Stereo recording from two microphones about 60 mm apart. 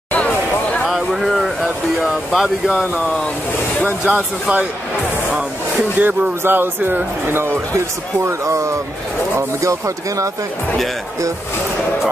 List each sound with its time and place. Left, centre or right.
0.8 s speech: centre
3.8 s speech: right
5.9 s speech: right
8.3 s speech: right